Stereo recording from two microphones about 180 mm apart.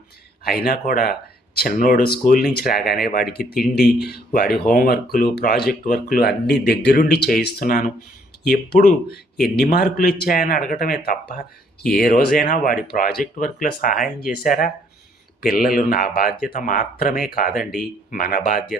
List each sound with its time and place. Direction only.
0.4 s speech: 60° left (ahead or behind)